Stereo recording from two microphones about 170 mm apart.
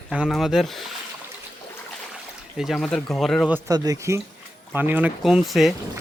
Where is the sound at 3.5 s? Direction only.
20° right (ahead or behind); by 5.7 s centre (ahead or behind).